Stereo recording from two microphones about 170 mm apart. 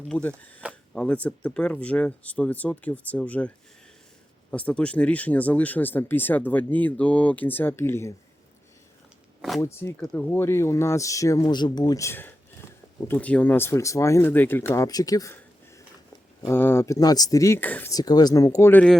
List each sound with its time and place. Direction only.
0.1 s speech: 10° left (ahead or behind)
4.5 s speech: 5° left (ahead or behind)
9.6 s speech: 15° left (ahead or behind)
10.0 s speech: 5° left (ahead or behind)
17.9 s speech: 25° left (ahead or behind)